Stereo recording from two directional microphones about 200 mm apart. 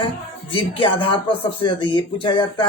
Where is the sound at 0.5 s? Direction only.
25° left (ahead or behind).